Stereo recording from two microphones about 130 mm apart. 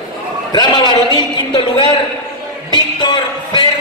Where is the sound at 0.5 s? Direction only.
35° left (ahead or behind).